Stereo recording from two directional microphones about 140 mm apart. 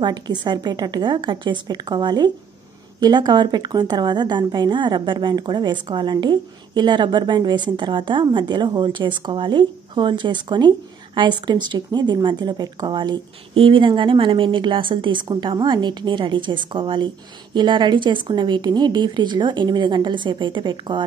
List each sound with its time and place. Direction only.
0.0 s a woman's voice: 30° right (ahead or behind)